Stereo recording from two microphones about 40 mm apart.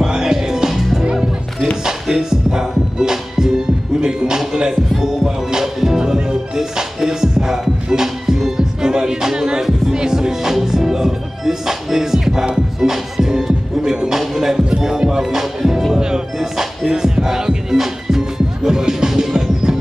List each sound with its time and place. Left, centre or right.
0.0 s music: centre
2.0 s music: centre